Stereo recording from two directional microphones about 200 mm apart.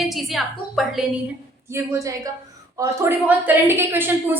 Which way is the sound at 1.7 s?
15° right (ahead or behind).